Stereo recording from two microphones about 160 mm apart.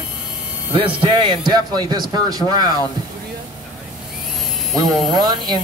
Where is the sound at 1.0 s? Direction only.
30° right (ahead or behind).